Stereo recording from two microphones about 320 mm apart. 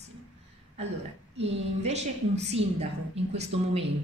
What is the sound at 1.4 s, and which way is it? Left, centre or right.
A woman's voice, centre.